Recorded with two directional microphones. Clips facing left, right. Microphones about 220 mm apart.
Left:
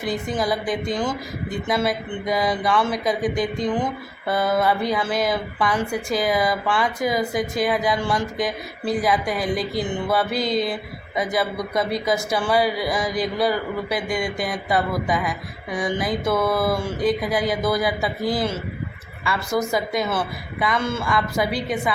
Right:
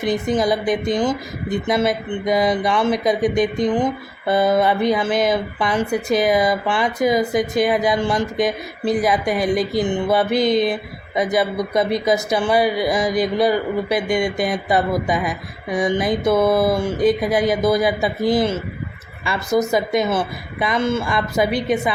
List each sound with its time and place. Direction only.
0.0 s a woman's voice: 20° right (ahead or behind)